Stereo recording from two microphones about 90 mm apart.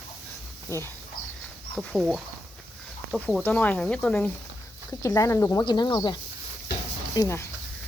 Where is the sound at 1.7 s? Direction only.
Centre (ahead or behind).